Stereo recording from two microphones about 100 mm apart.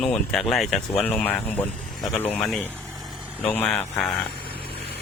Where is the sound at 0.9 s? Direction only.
15° left (ahead or behind).